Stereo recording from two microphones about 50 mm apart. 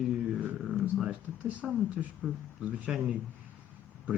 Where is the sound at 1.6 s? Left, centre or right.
Centre.